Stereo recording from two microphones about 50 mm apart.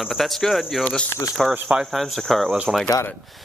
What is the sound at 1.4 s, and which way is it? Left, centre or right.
Speech, centre.